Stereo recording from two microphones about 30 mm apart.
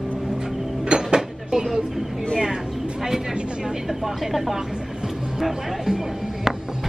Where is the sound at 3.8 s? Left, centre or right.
Centre.